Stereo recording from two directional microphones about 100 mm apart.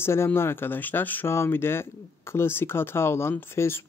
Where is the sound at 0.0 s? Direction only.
25° left (ahead or behind).